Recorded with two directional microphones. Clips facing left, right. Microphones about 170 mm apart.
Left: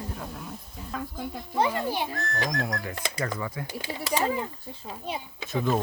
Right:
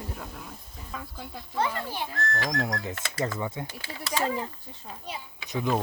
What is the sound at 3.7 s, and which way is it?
Speech, 15° left (ahead or behind).